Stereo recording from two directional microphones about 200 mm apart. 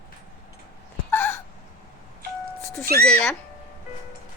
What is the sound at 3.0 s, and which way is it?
Speech, 10° left (ahead or behind).